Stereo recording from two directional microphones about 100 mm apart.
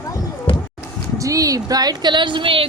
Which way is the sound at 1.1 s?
35° right (ahead or behind).